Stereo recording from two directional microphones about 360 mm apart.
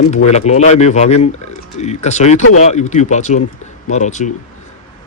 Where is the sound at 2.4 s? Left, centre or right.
Left.